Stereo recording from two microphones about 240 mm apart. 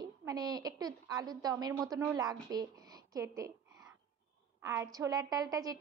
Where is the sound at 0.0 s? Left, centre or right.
Centre.